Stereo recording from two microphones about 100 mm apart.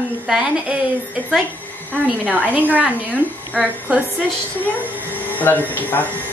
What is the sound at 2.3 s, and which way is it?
A woman's voice, 15° right (ahead or behind).